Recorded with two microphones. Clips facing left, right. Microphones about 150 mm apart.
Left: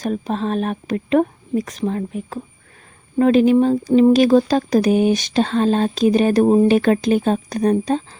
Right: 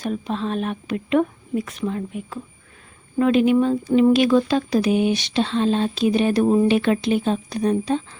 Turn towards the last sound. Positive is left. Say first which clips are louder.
# left 3 dB
turn(degrees=45)  # may be behind; listen again after turning